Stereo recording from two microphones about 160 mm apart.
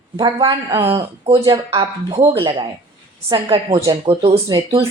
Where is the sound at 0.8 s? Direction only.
35° right (ahead or behind).